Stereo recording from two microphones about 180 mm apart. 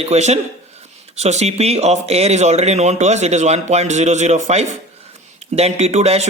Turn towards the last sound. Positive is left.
turn(degrees=-35)  # may be behind; listen again after turning